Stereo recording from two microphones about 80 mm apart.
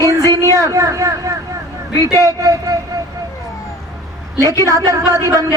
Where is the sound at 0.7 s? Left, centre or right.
Right.